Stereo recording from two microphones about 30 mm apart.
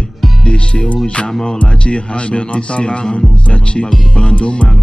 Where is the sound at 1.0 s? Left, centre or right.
Left.